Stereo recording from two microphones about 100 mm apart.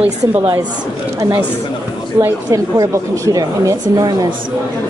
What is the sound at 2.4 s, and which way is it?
A woman's voice, 35° right (ahead or behind).